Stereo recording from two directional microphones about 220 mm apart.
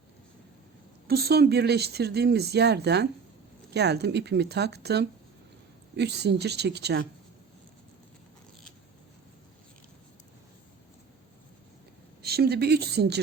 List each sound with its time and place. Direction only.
1.0 s speech: 45° right (ahead or behind)
12.2 s speech: 45° right (ahead or behind)